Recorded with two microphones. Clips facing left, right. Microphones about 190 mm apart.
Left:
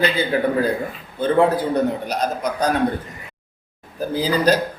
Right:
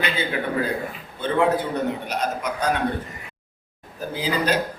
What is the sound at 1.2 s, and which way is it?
A man's voice, 35° left (ahead or behind).